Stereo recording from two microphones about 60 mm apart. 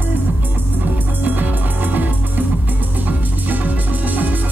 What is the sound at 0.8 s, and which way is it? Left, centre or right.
Music, right.